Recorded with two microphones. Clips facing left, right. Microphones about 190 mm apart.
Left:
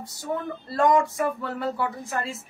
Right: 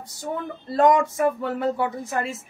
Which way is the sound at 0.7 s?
20° right (ahead or behind).